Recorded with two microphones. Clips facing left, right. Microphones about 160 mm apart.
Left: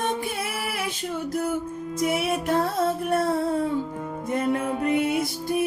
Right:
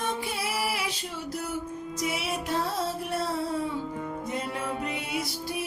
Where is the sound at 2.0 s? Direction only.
50° left (ahead or behind).